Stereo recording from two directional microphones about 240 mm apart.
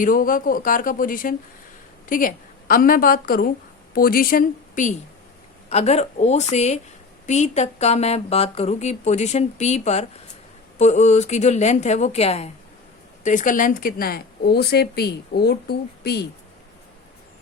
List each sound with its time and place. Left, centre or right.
0.0 s speech: left